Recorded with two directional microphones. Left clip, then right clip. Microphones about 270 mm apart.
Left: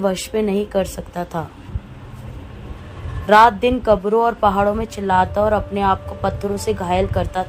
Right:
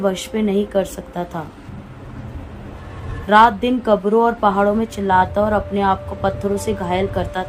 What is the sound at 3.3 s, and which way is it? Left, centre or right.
Speech, left.